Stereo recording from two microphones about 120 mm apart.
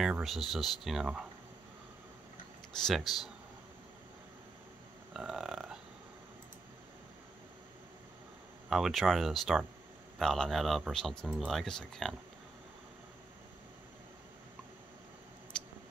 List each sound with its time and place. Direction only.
0.0 s speech: 5° right (ahead or behind)
2.8 s speech: centre (ahead or behind)
5.1 s speech: 5° right (ahead or behind)
8.6 s speech: centre (ahead or behind)
15.5 s a sound: 5° left (ahead or behind)